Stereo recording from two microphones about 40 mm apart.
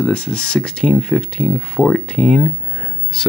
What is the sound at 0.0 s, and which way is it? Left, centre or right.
Speech, left.